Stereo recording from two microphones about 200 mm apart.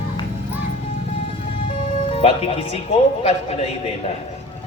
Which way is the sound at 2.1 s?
30° left (ahead or behind).